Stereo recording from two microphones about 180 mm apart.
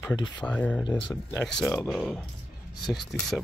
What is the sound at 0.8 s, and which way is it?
Speech, 25° left (ahead or behind).